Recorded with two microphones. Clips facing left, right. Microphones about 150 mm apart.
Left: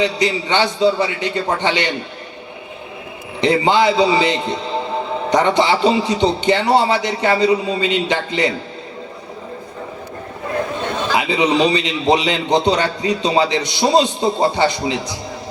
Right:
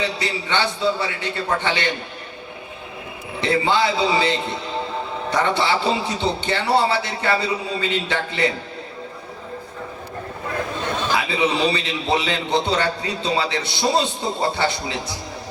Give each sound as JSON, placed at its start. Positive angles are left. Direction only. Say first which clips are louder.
{"t": 0.0, "sound": "a man's voice", "louder": "left 7 dB", "side_deg": 20}
{"t": 3.4, "sound": "a man's voice", "louder": "left 5 dB", "side_deg": 20}
{"t": 11.2, "sound": "a man's voice", "louder": "left 7 dB", "side_deg": 20}